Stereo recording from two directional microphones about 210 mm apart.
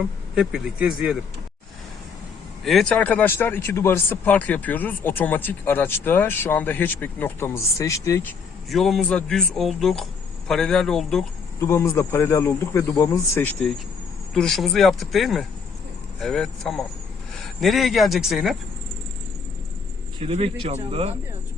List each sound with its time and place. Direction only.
0.3 s speech: 5° right (ahead or behind)
2.6 s speech: 5° left (ahead or behind)
20.2 s a man's voice: 30° right (ahead or behind)